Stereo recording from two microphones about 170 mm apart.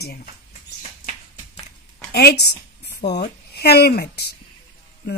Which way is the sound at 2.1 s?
70° left (ahead or behind).